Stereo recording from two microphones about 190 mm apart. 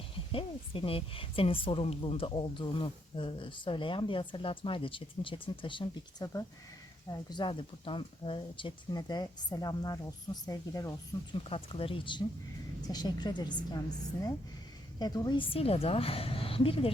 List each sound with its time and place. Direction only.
0.3 s a woman's voice: 30° left (ahead or behind)
11.4 s a woman's voice: 30° left (ahead or behind)